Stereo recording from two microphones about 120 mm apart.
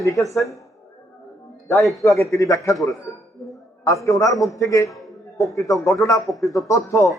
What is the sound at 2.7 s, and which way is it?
Speech, centre (ahead or behind).